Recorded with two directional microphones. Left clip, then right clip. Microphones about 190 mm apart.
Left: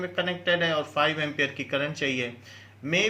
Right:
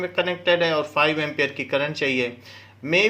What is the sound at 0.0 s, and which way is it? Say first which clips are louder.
Speech: right 5 dB; 35° right (ahead or behind).